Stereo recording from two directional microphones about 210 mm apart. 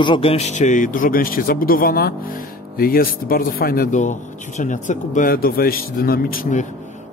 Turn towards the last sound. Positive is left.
turn(degrees=40)  # may be behind; listen again after turning